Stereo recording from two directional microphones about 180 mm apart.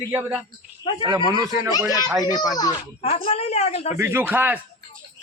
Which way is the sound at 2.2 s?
20° left (ahead or behind).